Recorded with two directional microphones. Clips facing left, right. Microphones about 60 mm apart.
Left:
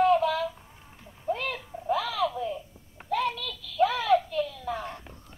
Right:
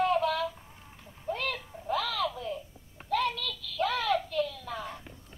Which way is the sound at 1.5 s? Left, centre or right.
Centre.